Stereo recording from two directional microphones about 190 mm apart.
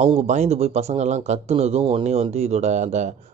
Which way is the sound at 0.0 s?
35° right (ahead or behind).